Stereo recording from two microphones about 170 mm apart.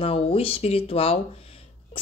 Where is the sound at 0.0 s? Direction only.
35° left (ahead or behind).